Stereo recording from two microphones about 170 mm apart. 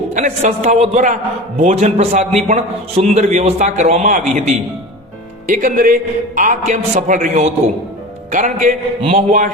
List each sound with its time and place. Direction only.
0.1 s a man's voice: 45° right (ahead or behind)